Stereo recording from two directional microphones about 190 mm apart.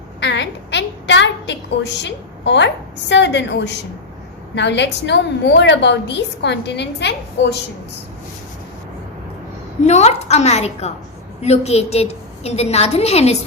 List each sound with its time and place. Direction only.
0.2 s a sound: 65° left (ahead or behind)
3.1 s a woman's voice: 70° left (ahead or behind)
9.8 s a woman's voice: 35° left (ahead or behind)